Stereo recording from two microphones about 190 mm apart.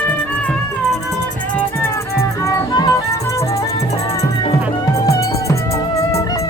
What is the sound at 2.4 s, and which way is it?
Music, 20° left (ahead or behind).